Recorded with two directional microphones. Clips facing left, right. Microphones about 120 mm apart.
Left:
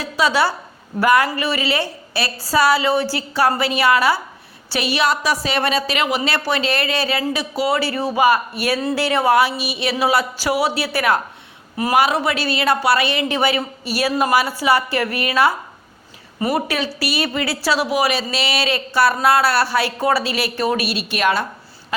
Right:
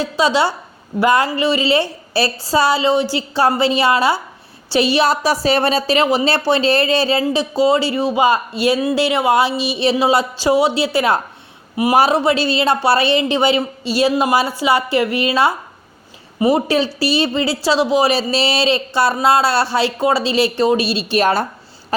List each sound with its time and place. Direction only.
0.0 s a woman's voice: 25° right (ahead or behind)